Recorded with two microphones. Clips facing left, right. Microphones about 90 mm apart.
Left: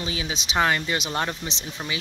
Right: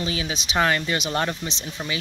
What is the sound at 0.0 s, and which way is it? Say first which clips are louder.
Speech: right 2 dB; 20° left (ahead or behind).